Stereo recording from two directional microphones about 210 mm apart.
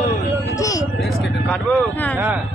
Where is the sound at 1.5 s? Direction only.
5° left (ahead or behind).